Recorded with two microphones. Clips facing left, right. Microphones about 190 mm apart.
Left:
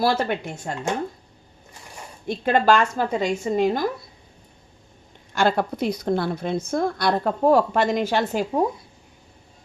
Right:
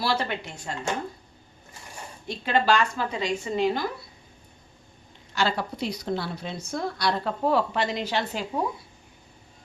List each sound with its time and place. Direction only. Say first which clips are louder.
0.0 s a woman's voice: left 6 dB; 50° left (ahead or behind)
2.2 s a woman's voice: left 5 dB; 50° left (ahead or behind)
5.3 s a woman's voice: left 6 dB; 55° left (ahead or behind)